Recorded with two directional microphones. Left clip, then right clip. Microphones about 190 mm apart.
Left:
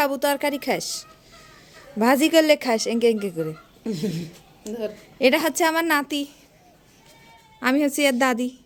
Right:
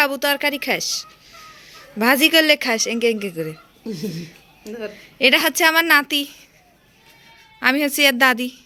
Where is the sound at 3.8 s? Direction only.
15° left (ahead or behind).